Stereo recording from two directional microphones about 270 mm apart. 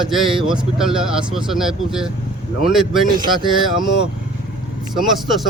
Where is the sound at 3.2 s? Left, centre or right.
Centre.